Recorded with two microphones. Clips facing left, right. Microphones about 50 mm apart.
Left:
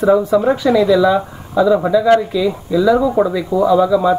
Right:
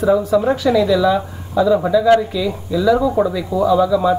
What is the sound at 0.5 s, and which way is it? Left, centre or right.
Speech, centre.